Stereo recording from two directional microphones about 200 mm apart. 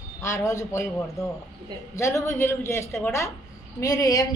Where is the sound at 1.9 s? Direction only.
15° left (ahead or behind).